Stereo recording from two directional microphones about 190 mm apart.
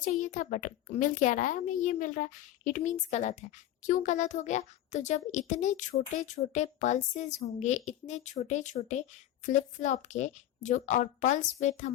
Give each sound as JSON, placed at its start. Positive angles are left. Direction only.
{"t": 0.0, "sound": "a child's voice", "side_deg": 45}